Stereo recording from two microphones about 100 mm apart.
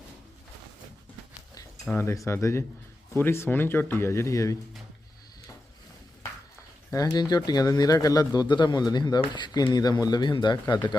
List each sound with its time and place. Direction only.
2.0 s speech: 30° left (ahead or behind)
6.9 s speech: 40° left (ahead or behind)